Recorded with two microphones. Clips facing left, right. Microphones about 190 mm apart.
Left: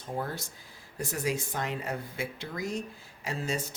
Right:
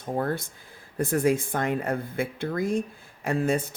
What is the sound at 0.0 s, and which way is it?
Speech, 55° right (ahead or behind).